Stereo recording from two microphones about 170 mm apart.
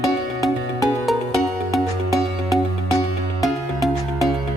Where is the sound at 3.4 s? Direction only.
Centre (ahead or behind).